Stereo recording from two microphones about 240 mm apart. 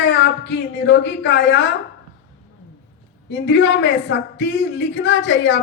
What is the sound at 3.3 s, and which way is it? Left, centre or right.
A woman's voice, left.